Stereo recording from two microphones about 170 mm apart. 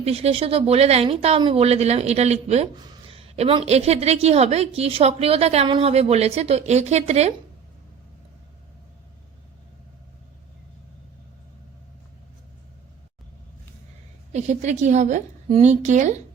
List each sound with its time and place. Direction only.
0.0 s a woman's voice: 35° right (ahead or behind)
2.7 s a woman's voice: 30° right (ahead or behind)
14.3 s a woman's voice: 40° right (ahead or behind)